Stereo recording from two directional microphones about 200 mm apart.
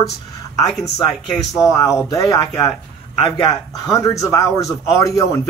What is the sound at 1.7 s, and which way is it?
Speech, 15° left (ahead or behind).